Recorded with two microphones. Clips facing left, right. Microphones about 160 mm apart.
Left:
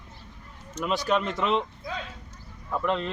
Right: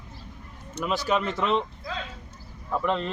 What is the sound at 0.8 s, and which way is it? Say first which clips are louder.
Speech: even; 5° right (ahead or behind).